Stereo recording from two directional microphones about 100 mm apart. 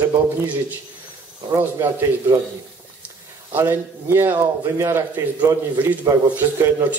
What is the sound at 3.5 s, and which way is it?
Speech, 25° right (ahead or behind).